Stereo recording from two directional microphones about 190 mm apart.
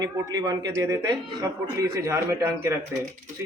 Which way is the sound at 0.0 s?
20° right (ahead or behind).